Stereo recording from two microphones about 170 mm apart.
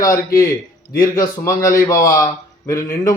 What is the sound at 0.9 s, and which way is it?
A man's voice, 20° left (ahead or behind).